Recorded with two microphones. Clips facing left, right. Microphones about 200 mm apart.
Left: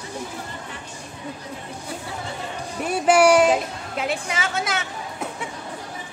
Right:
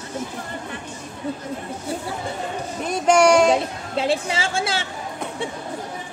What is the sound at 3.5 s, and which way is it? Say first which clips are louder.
A woman's voice: right 2 dB; 30° right (ahead or behind).